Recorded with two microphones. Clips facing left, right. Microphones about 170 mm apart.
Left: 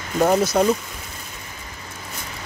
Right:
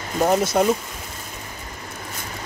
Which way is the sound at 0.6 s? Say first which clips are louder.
Even; 10° right (ahead or behind).